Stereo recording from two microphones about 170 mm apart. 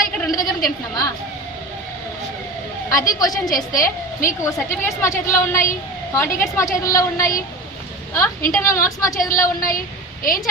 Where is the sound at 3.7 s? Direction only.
55° left (ahead or behind).